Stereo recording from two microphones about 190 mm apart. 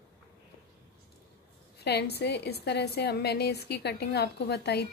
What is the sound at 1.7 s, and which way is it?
A woman's voice, 60° left (ahead or behind).